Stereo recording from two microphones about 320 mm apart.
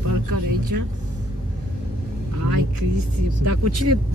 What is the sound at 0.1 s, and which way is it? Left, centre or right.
Speech, right.